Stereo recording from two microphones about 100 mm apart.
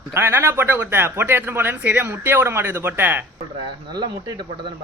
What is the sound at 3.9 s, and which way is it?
Speech, 50° right (ahead or behind).